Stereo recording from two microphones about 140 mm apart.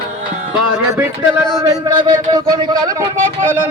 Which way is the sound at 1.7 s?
25° right (ahead or behind).